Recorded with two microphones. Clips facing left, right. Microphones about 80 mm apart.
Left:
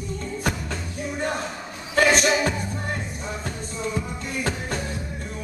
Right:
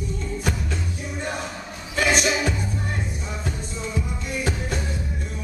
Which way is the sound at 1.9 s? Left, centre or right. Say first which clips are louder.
Left 3 dB; left.